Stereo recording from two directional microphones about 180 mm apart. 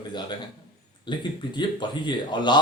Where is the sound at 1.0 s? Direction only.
25° left (ahead or behind).